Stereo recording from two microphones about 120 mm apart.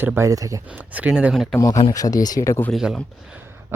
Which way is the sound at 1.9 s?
30° left (ahead or behind).